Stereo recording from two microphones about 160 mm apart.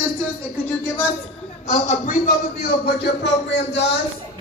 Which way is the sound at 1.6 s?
50° left (ahead or behind).